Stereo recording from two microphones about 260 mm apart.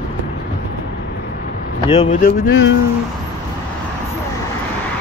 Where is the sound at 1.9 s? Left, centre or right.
Left.